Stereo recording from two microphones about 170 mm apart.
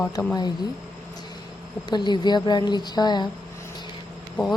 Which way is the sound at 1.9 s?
25° left (ahead or behind).